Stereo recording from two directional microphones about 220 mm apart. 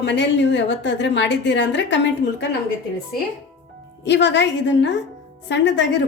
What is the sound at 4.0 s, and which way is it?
A woman's voice, 55° left (ahead or behind).